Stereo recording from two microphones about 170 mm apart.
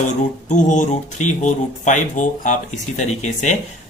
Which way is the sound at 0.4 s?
45° left (ahead or behind).